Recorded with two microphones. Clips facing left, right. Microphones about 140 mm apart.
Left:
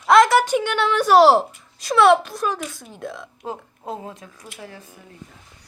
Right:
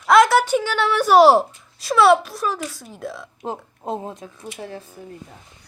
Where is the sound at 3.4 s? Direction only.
20° right (ahead or behind).